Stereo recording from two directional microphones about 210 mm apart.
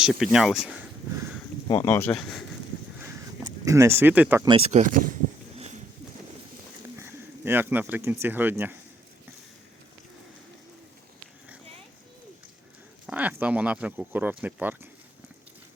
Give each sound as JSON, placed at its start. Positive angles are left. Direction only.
{"t": 0.0, "sound": "speech", "side_deg": -5}
{"t": 1.6, "sound": "speech", "side_deg": 15}
{"t": 3.7, "sound": "speech", "side_deg": -15}
{"t": 4.4, "sound": "speech", "side_deg": -25}
{"t": 4.8, "sound": "speech", "side_deg": -40}
{"t": 6.9, "sound": "speech", "side_deg": -10}
{"t": 13.1, "sound": "speech", "side_deg": -10}